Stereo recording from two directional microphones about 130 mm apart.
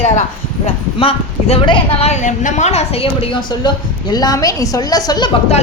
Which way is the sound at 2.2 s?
75° left (ahead or behind).